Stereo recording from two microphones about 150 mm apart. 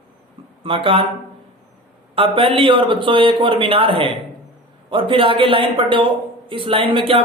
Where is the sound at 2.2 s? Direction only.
35° right (ahead or behind).